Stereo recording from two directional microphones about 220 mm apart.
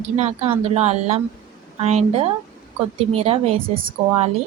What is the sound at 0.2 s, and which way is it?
A woman's voice, 30° right (ahead or behind).